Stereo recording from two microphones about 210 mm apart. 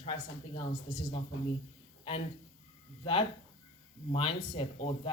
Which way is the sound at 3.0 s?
25° left (ahead or behind).